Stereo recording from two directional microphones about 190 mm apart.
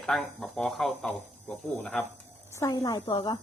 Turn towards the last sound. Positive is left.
turn(degrees=20)  # may be behind; listen again after turning